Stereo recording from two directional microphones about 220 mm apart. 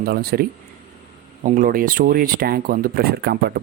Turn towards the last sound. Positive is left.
turn(degrees=-45)  # may be behind; listen again after turning